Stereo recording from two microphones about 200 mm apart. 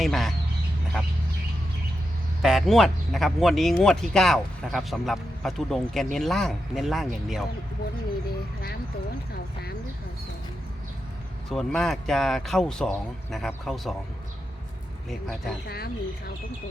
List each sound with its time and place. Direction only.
0.0 s speech: centre (ahead or behind)
2.4 s speech: centre (ahead or behind)
11.4 s speech: centre (ahead or behind)
15.6 s speech: 50° left (ahead or behind)